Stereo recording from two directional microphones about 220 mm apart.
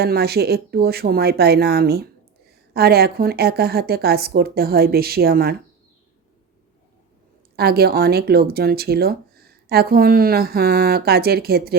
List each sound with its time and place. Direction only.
0.0 s speech: 45° right (ahead or behind)
7.5 s speech: 45° right (ahead or behind)